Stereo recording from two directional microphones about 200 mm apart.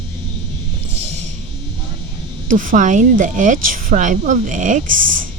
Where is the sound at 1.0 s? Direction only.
35° right (ahead or behind).